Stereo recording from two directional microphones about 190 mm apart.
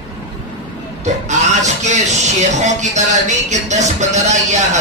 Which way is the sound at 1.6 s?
40° right (ahead or behind).